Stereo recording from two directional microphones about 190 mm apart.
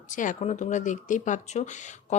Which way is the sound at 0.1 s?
40° left (ahead or behind).